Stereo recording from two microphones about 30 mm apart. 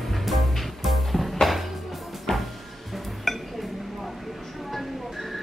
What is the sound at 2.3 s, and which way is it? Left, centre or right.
Music, centre.